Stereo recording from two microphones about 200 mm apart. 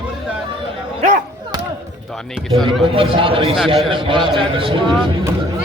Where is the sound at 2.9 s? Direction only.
25° right (ahead or behind).